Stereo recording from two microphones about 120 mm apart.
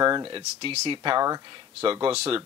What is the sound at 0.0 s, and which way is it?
Speech, 40° right (ahead or behind).